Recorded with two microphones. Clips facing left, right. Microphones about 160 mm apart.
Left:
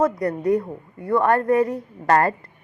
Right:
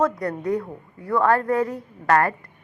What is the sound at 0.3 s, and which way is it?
A woman's voice, 25° left (ahead or behind).